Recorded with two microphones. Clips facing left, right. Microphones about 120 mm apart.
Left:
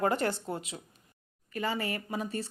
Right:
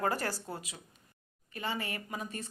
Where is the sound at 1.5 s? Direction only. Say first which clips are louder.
Left 5 dB; 40° left (ahead or behind).